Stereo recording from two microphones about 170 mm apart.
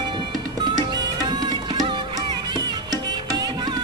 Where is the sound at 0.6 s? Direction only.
25° right (ahead or behind).